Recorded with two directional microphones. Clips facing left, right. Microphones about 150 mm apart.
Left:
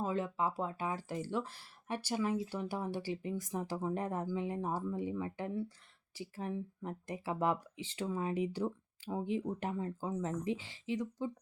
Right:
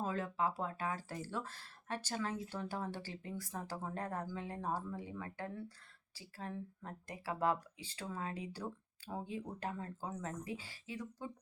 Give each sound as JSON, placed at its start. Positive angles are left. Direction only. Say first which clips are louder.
{"t": 0.0, "sound": "speech", "louder": "left 2 dB", "side_deg": 20}